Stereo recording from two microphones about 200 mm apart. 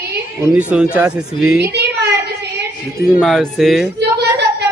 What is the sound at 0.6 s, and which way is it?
Speech, 5° right (ahead or behind).